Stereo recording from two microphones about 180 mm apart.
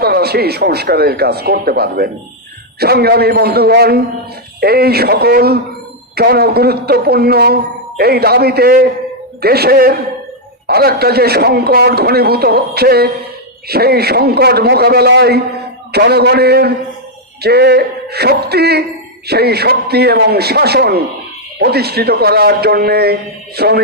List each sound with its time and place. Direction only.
0.0 s speech: 60° right (ahead or behind)